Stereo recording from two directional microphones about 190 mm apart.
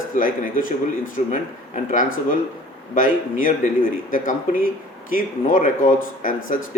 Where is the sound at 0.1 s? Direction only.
45° left (ahead or behind).